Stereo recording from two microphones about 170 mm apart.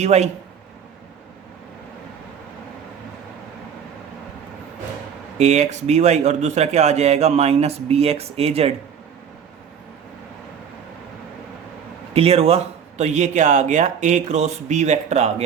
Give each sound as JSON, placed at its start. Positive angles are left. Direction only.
{"t": 0.0, "sound": "speech", "side_deg": -40}
{"t": 5.4, "sound": "speech", "side_deg": -40}
{"t": 12.1, "sound": "speech", "side_deg": -35}